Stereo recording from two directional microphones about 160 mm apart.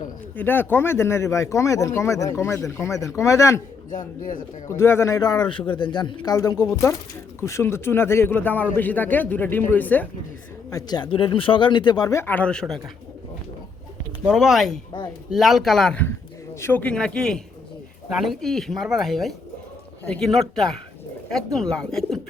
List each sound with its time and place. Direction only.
0.3 s speech: 10° left (ahead or behind)
3.9 s speech: 55° left (ahead or behind)
4.7 s speech: 15° left (ahead or behind)
10.7 s speech: 25° left (ahead or behind); by 12.8 s 5° left (ahead or behind)
14.3 s speech: centre (ahead or behind)